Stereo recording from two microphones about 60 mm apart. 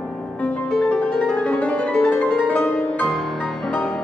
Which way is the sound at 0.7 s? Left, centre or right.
Centre.